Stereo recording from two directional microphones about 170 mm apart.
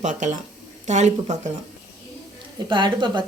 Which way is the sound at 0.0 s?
45° right (ahead or behind).